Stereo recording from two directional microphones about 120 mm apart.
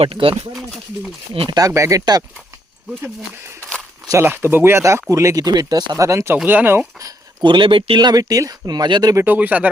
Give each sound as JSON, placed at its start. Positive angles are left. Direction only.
{"t": 0.0, "sound": "speech", "side_deg": -50}
{"t": 1.5, "sound": "speech", "side_deg": -25}
{"t": 4.0, "sound": "speech", "side_deg": -25}
{"t": 6.4, "sound": "speech", "side_deg": -15}
{"t": 7.4, "sound": "speech", "side_deg": -45}
{"t": 9.1, "sound": "speech", "side_deg": -15}